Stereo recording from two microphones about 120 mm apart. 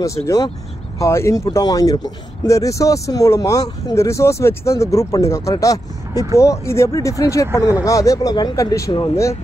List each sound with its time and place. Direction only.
0.0 s speech: 25° left (ahead or behind)